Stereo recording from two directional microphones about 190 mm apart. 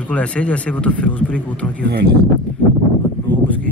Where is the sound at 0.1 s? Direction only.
5° left (ahead or behind).